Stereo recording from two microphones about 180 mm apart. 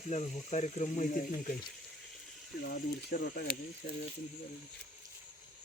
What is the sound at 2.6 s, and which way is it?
Speech, 55° left (ahead or behind).